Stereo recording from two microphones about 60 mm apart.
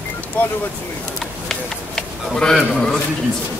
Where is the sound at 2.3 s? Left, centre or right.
Centre.